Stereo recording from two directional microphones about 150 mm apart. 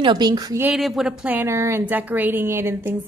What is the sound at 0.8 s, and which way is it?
A woman's voice, centre (ahead or behind).